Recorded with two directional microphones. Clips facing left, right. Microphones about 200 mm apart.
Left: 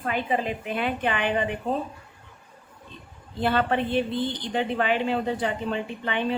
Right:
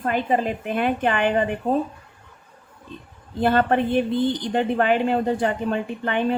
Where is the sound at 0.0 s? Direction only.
45° right (ahead or behind).